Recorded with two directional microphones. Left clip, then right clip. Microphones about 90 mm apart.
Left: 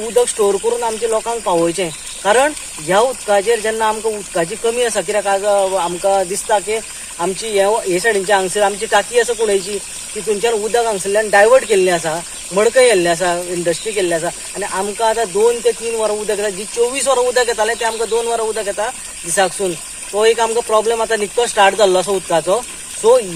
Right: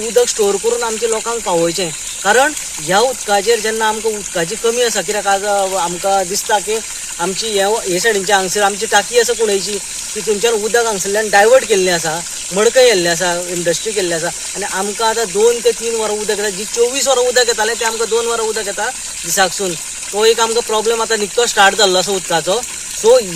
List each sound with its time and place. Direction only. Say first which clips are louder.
0.2 s speech: right 1 dB; 35° left (ahead or behind)
20.1 s speech: right 1 dB; 40° left (ahead or behind)